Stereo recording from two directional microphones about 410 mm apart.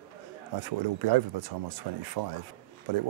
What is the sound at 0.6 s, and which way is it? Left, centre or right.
Speech, right.